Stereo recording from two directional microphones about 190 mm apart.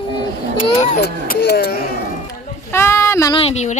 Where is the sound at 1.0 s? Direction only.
60° left (ahead or behind).